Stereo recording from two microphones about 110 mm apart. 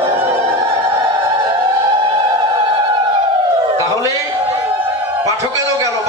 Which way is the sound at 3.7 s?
30° right (ahead or behind).